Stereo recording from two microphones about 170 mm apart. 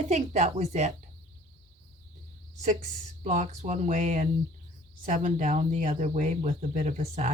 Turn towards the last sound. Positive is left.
turn(degrees=-40)  # may be behind; listen again after turning